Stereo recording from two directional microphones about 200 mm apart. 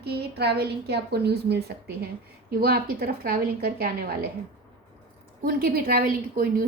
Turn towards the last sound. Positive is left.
turn(degrees=-45)  # may be behind; listen again after turning